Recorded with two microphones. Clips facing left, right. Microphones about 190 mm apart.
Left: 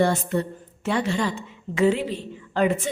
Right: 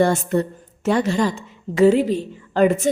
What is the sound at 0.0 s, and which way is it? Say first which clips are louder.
A woman's voice: right 4 dB; 45° right (ahead or behind).